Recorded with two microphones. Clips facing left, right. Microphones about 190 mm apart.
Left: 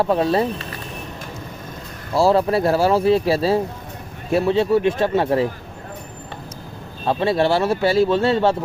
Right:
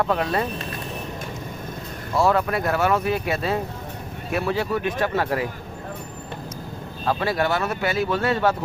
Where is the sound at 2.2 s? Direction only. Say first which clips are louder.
Left 4 dB; 30° left (ahead or behind).